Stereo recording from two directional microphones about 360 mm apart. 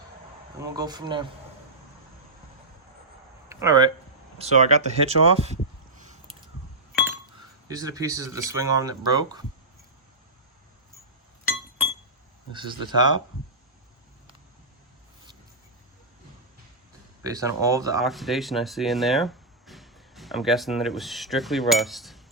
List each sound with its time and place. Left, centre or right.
0.6 s speech: centre
3.5 s speech: centre
7.7 s speech: centre
12.5 s speech: centre
17.2 s speech: centre